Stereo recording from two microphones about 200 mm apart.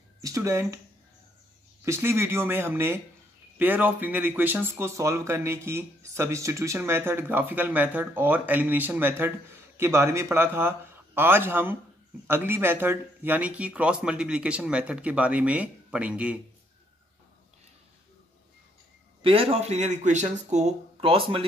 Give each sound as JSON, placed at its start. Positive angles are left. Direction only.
{"t": 0.2, "sound": "speech", "side_deg": -15}
{"t": 1.9, "sound": "speech", "side_deg": -10}
{"t": 19.2, "sound": "speech", "side_deg": -30}